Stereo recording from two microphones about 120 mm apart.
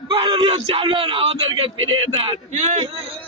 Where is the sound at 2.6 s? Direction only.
70° right (ahead or behind).